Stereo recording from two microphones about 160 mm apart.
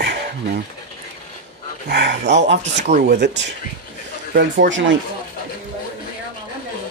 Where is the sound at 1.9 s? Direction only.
90° right.